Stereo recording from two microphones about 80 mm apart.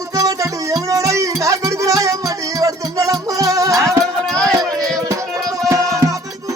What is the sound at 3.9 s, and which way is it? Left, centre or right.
Music, centre.